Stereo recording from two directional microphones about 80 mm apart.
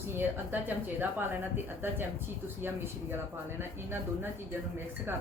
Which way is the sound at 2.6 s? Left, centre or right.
Right.